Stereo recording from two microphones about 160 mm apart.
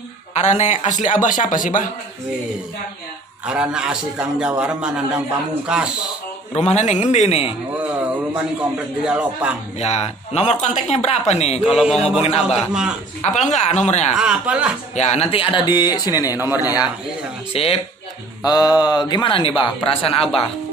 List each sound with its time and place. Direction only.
0.3 s speech: 45° left (ahead or behind)
3.4 s a man's voice: 5° right (ahead or behind)
6.5 s speech: 45° left (ahead or behind)
7.8 s a man's voice: 10° right (ahead or behind)
9.8 s speech: 40° left (ahead or behind)
11.6 s a man's voice: 5° right (ahead or behind)
12.2 s speech: 40° left (ahead or behind)
12.4 s a man's voice: 5° right (ahead or behind)
13.2 s speech: 50° left (ahead or behind)
14.1 s speech: 5° right (ahead or behind)
15.0 s a man's voice: 45° left (ahead or behind); by 16.8 s 25° left (ahead or behind)
17.5 s speech: 35° left (ahead or behind)
18.4 s a man's voice: 25° left (ahead or behind)